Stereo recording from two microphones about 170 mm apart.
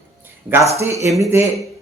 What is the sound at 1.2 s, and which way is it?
Speech, 15° right (ahead or behind).